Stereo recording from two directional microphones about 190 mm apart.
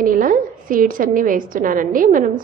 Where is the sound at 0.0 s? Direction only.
45° right (ahead or behind).